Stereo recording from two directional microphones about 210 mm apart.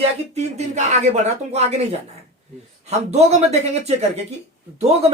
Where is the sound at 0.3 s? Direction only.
30° right (ahead or behind).